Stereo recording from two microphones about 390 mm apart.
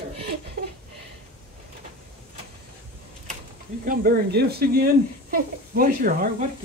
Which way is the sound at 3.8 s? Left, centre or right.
Right.